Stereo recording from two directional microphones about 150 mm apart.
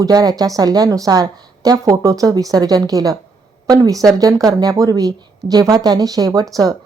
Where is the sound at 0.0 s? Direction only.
25° right (ahead or behind).